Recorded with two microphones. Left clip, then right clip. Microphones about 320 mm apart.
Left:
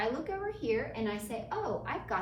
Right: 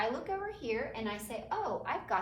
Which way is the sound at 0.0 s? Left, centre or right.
Centre.